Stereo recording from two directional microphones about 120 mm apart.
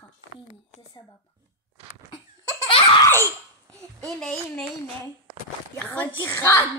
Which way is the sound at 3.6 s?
30° right (ahead or behind).